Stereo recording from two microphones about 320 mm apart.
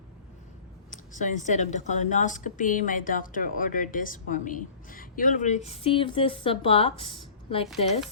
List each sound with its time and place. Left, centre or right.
1.1 s a woman's voice: left